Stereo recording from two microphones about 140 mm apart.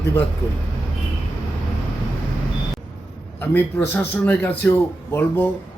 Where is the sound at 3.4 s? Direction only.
10° left (ahead or behind).